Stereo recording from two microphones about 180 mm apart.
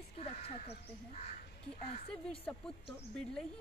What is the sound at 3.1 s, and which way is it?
Speech, 5° left (ahead or behind).